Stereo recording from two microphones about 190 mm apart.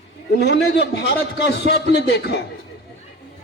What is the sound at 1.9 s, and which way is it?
Speech, 60° left (ahead or behind).